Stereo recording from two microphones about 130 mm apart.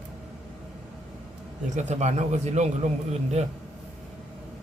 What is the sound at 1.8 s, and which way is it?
A man's voice, 65° right (ahead or behind).